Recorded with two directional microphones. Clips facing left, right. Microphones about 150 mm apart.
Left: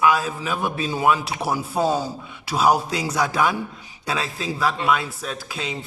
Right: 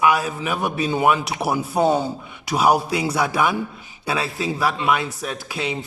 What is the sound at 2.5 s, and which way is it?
Speech, 10° right (ahead or behind).